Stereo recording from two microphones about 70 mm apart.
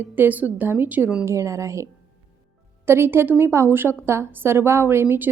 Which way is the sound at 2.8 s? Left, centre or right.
Right.